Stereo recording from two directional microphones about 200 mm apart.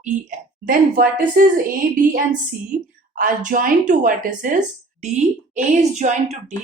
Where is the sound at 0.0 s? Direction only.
40° right (ahead or behind).